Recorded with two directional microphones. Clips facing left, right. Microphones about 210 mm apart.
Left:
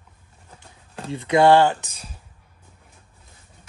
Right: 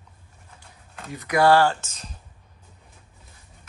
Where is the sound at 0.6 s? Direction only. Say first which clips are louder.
Left 6 dB; 30° left (ahead or behind); by 2.1 s 10° left (ahead or behind).